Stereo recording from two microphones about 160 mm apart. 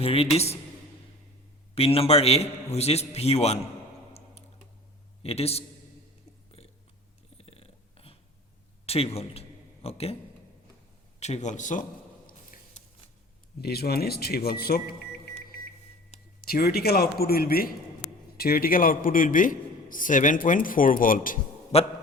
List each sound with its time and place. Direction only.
0.0 s a man's voice: 35° left (ahead or behind)
1.7 s a man's voice: 40° left (ahead or behind)
5.2 s a man's voice: 40° left (ahead or behind)
6.6 s whispering: 40° left (ahead or behind)
7.3 s a sound: 35° left (ahead or behind)
8.9 s a man's voice: 40° left (ahead or behind)
11.2 s a sound: 45° left (ahead or behind)
13.6 s speech: 80° left
16.4 s a man's voice: 75° left (ahead or behind); by 21.3 s 60° left (ahead or behind)
21.7 s a man's voice: 40° left (ahead or behind)